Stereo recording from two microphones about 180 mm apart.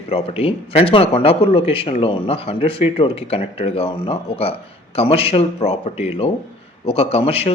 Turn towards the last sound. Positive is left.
turn(degrees=35)  # may be behind; listen again after turning